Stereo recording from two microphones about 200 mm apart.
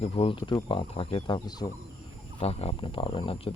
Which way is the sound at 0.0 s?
30° left (ahead or behind).